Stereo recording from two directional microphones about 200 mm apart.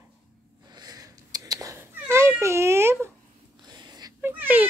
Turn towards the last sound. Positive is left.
turn(degrees=-10)  # may be behind; listen again after turning